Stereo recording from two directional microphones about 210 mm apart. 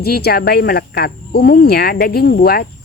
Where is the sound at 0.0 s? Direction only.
50° left (ahead or behind).